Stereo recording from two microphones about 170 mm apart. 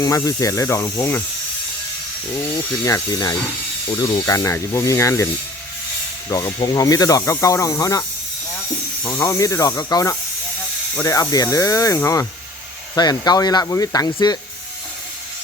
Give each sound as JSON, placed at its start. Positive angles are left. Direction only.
{"t": 0.0, "sound": "speech", "side_deg": 20}
{"t": 2.8, "sound": "speech", "side_deg": 20}
{"t": 6.3, "sound": "speech", "side_deg": 20}
{"t": 9.0, "sound": "speech", "side_deg": 15}